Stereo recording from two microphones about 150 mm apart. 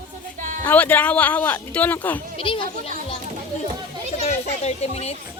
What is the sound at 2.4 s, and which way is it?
Speech, 35° left (ahead or behind).